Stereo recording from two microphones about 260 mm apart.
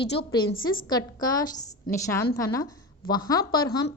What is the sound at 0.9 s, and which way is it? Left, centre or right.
Speech, centre.